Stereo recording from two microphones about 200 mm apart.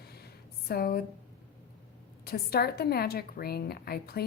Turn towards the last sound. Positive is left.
turn(degrees=50)  # may be behind; listen again after turning